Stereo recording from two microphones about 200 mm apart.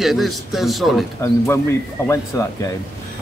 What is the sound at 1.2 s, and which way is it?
Speech, 15° left (ahead or behind).